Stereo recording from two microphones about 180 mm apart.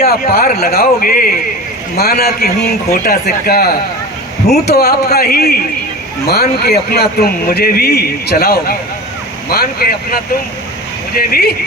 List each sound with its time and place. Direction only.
0.0 s speech: 55° left (ahead or behind)